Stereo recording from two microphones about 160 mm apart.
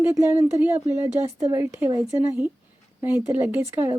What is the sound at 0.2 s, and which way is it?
Speech, 15° right (ahead or behind).